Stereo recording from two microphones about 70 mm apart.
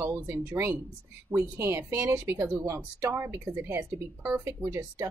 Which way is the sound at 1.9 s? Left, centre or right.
Right.